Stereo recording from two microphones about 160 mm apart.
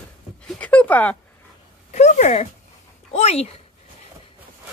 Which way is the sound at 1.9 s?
50° left (ahead or behind).